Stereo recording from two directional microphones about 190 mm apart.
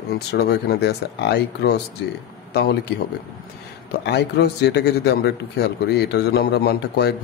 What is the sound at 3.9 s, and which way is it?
Speech, 60° left (ahead or behind).